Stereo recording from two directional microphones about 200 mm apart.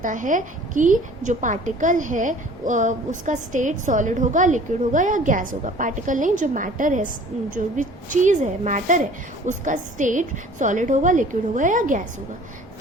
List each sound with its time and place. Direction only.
0.0 s a woman's voice: 40° right (ahead or behind)